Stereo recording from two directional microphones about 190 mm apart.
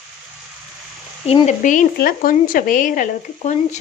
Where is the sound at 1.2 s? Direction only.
35° left (ahead or behind).